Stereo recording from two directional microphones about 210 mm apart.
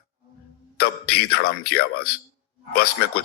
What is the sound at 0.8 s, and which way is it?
Speech, 50° left (ahead or behind).